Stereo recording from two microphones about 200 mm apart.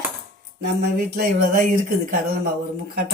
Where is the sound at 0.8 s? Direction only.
50° right (ahead or behind).